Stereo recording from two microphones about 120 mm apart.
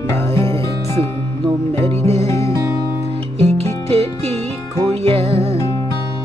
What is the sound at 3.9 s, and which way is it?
Music, 55° right (ahead or behind).